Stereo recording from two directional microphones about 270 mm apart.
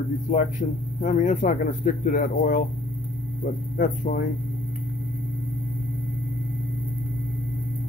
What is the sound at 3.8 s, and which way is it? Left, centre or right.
Speech, left.